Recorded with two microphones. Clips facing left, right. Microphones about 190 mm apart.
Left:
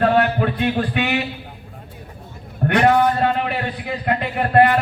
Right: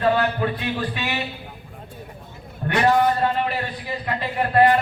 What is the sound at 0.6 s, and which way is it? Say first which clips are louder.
Speech: left 6 dB; 60° left (ahead or behind).